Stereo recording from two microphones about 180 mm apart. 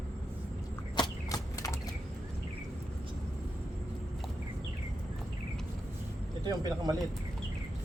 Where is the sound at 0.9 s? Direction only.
20° left (ahead or behind).